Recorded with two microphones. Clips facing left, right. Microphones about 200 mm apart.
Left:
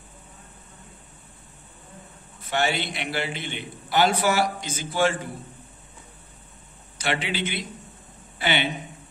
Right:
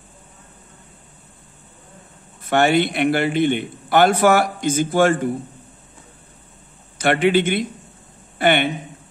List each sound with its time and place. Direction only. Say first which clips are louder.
2.5 s a man's voice: right 9 dB; 55° right (ahead or behind)
7.0 s a man's voice: right 11 dB; 55° right (ahead or behind)